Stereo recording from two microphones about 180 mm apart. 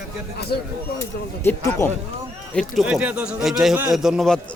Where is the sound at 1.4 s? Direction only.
10° left (ahead or behind).